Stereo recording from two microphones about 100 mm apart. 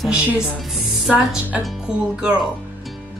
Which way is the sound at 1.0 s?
10° right (ahead or behind).